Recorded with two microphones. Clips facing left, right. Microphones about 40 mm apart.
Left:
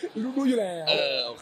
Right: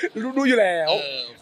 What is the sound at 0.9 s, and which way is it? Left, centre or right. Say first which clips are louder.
Speech: right 2 dB; centre.